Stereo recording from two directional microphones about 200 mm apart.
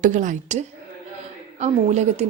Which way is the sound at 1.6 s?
35° right (ahead or behind).